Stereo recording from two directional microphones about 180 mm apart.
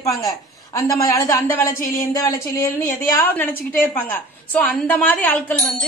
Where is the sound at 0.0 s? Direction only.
20° left (ahead or behind).